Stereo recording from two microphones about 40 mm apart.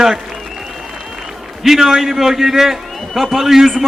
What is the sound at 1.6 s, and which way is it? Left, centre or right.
A man's voice, centre.